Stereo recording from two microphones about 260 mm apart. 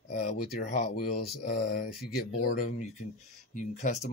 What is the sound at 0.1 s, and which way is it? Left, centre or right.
Speech, left.